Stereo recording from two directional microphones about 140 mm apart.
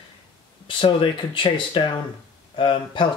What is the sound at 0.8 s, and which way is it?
Speech, 40° left (ahead or behind).